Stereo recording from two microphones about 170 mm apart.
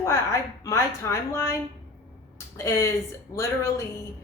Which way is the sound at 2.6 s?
15° left (ahead or behind).